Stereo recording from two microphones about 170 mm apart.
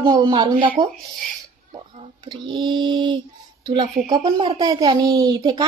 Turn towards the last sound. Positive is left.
turn(degrees=-25)  # may be behind; listen again after turning